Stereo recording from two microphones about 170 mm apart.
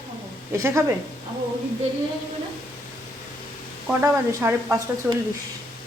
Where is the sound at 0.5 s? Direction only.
15° right (ahead or behind).